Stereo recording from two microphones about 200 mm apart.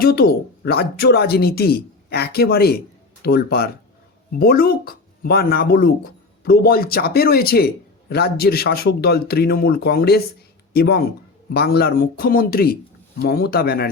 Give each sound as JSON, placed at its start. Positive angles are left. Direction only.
{"t": 0.0, "sound": "speech", "side_deg": 50}